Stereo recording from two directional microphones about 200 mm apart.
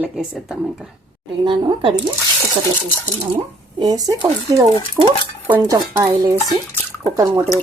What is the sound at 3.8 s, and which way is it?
Speech, 20° right (ahead or behind).